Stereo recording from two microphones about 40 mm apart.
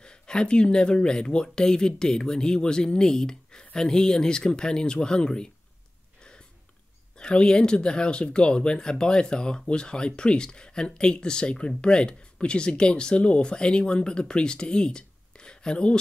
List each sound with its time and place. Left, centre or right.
0.0 s speech: left
7.2 s speech: left